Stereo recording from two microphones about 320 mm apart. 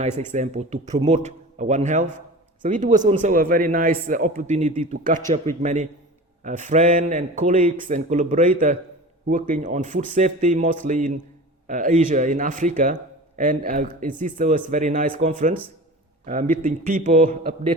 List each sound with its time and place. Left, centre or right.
0.0 s a man's voice: right